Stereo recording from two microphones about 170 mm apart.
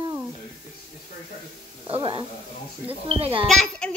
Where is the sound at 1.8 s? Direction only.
30° right (ahead or behind).